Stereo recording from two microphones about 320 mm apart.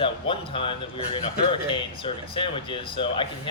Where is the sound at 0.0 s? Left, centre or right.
Centre.